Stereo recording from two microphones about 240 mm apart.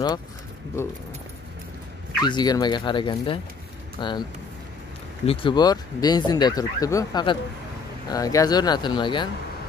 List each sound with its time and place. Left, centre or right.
2.2 s speech: centre